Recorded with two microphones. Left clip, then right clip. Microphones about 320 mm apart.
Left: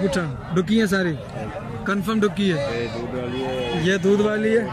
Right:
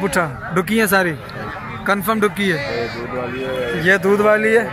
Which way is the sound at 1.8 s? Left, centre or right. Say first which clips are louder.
Right 6 dB; centre.